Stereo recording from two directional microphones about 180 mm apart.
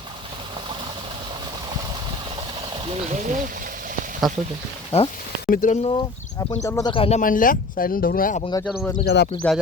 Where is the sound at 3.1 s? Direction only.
45° right (ahead or behind).